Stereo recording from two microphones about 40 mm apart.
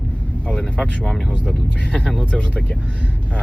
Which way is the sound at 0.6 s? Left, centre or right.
Left.